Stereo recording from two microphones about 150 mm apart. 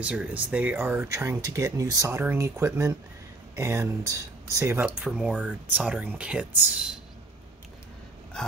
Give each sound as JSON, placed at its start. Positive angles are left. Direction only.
{"t": 0.0, "sound": "speech", "side_deg": -10}